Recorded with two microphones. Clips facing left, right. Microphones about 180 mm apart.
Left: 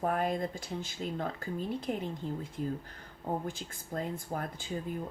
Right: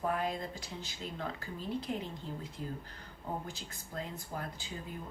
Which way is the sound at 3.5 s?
50° left (ahead or behind).